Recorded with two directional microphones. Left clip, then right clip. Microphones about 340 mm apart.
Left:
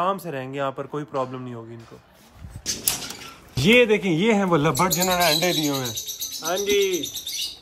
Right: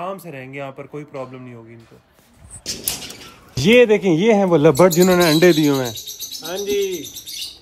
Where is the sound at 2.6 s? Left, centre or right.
Centre.